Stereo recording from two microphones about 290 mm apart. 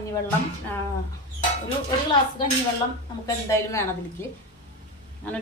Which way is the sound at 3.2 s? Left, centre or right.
Centre.